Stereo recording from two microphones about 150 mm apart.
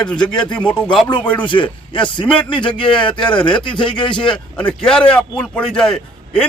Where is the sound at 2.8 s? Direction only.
5° left (ahead or behind).